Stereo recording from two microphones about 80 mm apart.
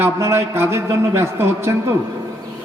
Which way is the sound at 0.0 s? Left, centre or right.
Right.